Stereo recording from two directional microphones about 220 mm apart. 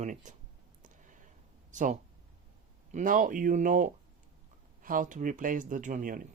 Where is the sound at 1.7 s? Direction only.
35° right (ahead or behind).